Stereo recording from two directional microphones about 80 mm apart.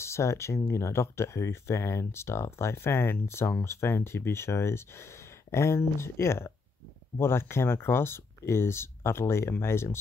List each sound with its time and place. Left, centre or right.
0.0 s speech: left